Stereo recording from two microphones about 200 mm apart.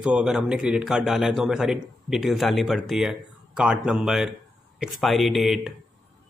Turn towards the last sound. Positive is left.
turn(degrees=0)  # may be behind; listen again after turning